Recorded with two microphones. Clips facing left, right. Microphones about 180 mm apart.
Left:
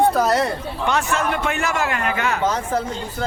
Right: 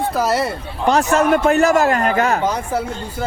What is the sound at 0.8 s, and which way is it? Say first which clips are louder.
A man's voice: right 7 dB; 40° right (ahead or behind).